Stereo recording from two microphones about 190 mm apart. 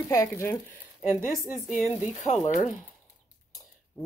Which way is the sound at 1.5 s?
40° left (ahead or behind).